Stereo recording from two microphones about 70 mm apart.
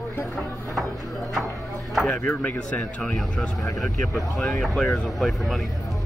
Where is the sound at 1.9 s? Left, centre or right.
Centre.